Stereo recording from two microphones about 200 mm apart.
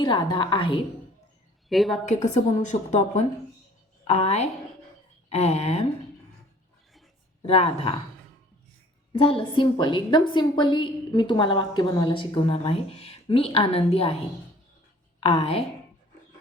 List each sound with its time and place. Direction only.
0.0 s a woman's voice: 25° left (ahead or behind)
1.7 s a woman's voice: centre (ahead or behind)
2.0 s a woman's voice: 35° left (ahead or behind)
7.4 s a woman's voice: 30° left (ahead or behind)
9.1 s a woman's voice: 25° left (ahead or behind)
15.2 s a woman's voice: 30° left (ahead or behind)